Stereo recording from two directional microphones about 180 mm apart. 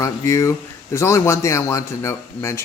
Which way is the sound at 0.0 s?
15° left (ahead or behind).